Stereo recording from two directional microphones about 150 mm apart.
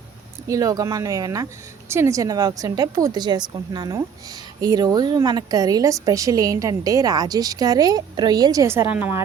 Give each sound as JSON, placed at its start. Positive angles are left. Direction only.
{"t": 0.4, "sound": "a woman's voice", "side_deg": -20}